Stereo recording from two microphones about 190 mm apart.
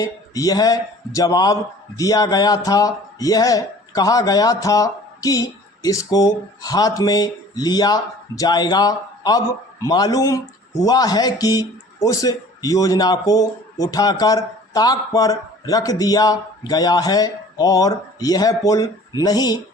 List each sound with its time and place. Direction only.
0.0 s speech: 20° left (ahead or behind)